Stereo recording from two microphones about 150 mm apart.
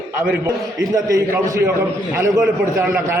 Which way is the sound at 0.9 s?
20° right (ahead or behind).